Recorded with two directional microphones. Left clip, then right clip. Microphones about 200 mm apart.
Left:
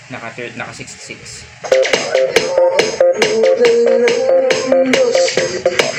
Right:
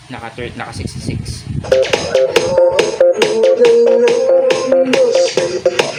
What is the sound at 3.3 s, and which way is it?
Music, 20° right (ahead or behind).